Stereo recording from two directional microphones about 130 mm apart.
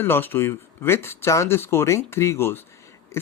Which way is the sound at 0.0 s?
15° left (ahead or behind).